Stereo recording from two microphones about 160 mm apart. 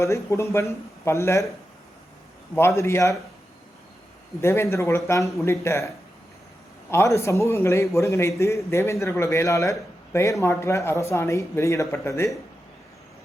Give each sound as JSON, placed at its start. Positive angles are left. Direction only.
{"t": 0.0, "sound": "a man's voice", "side_deg": 20}
{"t": 2.6, "sound": "a man's voice", "side_deg": 15}
{"t": 4.4, "sound": "a man's voice", "side_deg": 15}
{"t": 6.9, "sound": "a man's voice", "side_deg": 20}